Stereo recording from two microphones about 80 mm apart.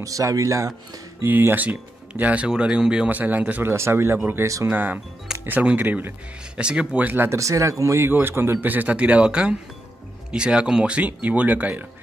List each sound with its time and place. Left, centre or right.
0.0 s speech: right
1.2 s speech: right
3.7 s speech: right
7.2 s speech: right
8.1 s speech: right